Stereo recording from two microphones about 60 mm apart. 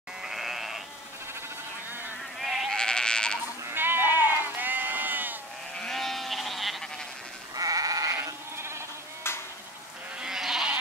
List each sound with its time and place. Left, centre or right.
0.2 s sheep: centre
2.3 s sheep: centre
2.7 s sheep: centre
3.7 s sheep: right
4.0 s sheep: left
4.6 s sheep: right
5.8 s sheep: centre
7.5 s sheep: right
10.2 s goat: centre